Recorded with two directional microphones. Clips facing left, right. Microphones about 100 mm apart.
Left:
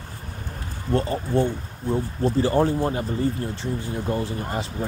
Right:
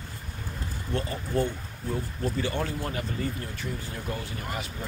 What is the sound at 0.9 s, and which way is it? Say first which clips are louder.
Speech: left 6 dB; 35° left (ahead or behind).